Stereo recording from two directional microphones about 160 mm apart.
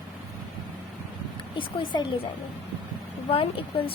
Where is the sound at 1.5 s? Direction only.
30° left (ahead or behind).